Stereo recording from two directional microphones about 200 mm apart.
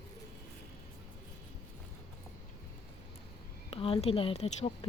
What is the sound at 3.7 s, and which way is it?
A woman's voice, 25° left (ahead or behind).